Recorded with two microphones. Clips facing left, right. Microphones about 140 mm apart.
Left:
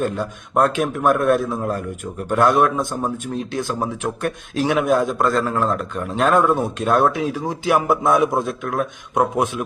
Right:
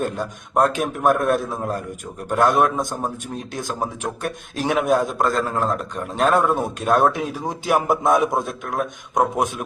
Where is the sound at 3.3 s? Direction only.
45° right (ahead or behind).